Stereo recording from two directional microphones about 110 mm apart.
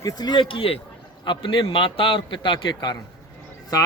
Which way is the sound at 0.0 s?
40° left (ahead or behind).